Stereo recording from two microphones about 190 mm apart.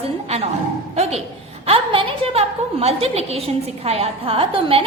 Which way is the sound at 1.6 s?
30° right (ahead or behind).